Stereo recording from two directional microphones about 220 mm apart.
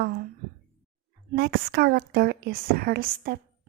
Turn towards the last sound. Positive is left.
turn(degrees=-45)  # may be behind; listen again after turning